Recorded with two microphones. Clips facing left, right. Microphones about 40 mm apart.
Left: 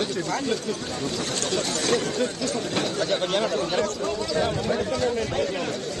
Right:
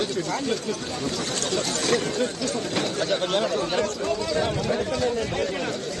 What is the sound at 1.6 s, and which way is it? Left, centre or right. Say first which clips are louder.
Speech: even; right.